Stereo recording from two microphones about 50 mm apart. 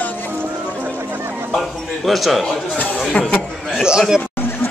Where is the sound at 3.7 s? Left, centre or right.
Centre.